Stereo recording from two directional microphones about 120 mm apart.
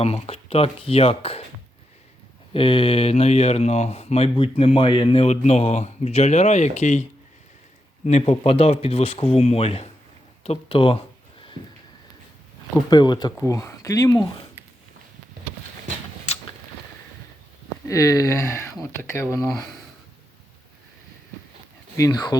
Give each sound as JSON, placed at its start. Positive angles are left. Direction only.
{"t": 0.0, "sound": "speech", "side_deg": 55}
{"t": 2.5, "sound": "speech", "side_deg": 50}
{"t": 10.4, "sound": "a sound", "side_deg": 55}
{"t": 12.9, "sound": "speech", "side_deg": 35}
{"t": 16.3, "sound": "a sound", "side_deg": 60}
{"t": 17.8, "sound": "speech", "side_deg": 25}
{"t": 21.9, "sound": "speech", "side_deg": 30}